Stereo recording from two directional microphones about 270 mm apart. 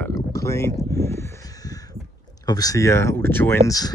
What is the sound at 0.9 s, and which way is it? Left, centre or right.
Crow, centre.